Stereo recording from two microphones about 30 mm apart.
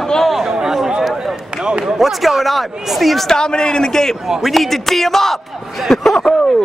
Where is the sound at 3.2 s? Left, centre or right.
Left.